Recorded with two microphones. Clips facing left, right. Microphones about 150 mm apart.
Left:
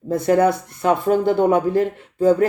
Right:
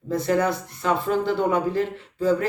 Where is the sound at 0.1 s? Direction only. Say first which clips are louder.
Left 6 dB; 50° left (ahead or behind).